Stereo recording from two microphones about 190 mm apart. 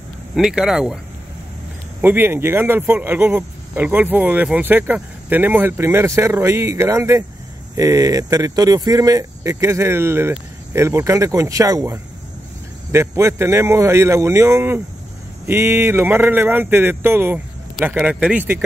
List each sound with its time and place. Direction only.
0.3 s speech: 5° right (ahead or behind)
2.0 s speech: 10° right (ahead or behind)